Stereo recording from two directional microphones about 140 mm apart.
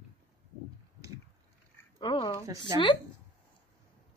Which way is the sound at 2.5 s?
25° right (ahead or behind).